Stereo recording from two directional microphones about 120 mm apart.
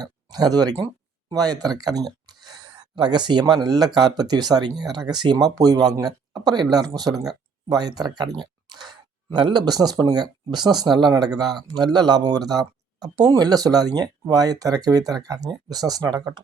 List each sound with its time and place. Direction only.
0.0 s speech: 35° right (ahead or behind)